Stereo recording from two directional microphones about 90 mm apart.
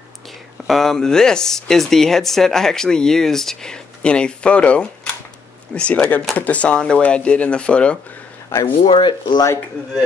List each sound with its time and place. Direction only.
0.7 s speech: 5° left (ahead or behind)
8.5 s speech: 30° left (ahead or behind)
8.8 s speech: 65° left (ahead or behind)